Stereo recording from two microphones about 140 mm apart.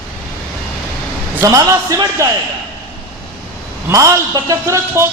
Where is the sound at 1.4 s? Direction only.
25° right (ahead or behind).